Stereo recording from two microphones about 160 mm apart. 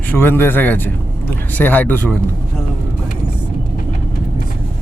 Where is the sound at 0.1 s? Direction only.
15° left (ahead or behind).